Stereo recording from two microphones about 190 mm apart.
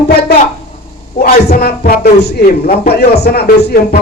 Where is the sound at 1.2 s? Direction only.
50° left (ahead or behind).